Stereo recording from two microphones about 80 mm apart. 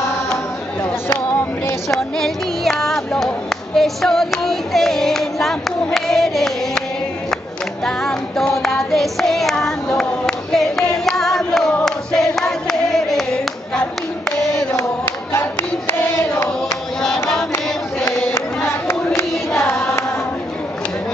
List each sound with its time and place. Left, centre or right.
1.9 s music: centre
3.3 s singing: centre
7.8 s clapping: centre
14.8 s hands: left
17.0 s choir: centre
18.0 s a sound: left